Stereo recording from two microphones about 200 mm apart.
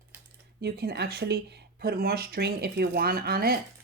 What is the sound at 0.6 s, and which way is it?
Speech, 55° right (ahead or behind).